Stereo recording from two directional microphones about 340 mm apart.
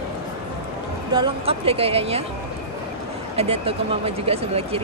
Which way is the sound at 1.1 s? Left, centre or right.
Centre.